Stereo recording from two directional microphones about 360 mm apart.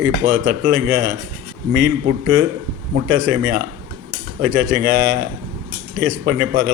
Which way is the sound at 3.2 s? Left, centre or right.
Right.